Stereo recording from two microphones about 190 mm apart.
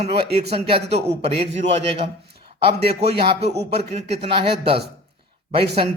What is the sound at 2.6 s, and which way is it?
Speech, 30° right (ahead or behind).